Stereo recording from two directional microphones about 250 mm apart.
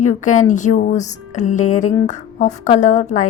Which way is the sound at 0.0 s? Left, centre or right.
Left.